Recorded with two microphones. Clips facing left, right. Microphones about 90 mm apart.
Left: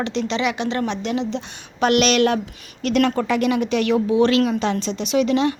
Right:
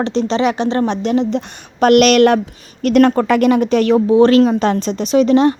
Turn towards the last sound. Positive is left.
turn(degrees=-40)  # may be behind; listen again after turning